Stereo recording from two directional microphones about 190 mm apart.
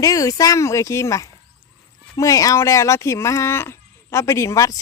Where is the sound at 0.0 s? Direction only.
20° left (ahead or behind).